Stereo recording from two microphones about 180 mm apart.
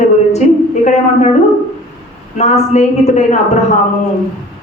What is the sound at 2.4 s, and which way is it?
A man's voice, 40° left (ahead or behind).